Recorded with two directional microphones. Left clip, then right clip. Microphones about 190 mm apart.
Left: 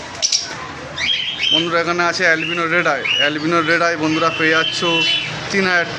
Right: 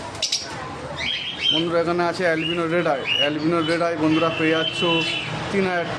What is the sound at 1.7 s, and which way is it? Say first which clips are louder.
Speech: left 4 dB; 10° right (ahead or behind).